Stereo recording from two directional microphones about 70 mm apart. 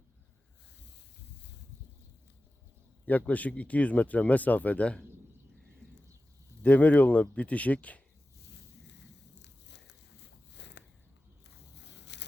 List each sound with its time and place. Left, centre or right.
3.1 s speech: left
6.6 s speech: left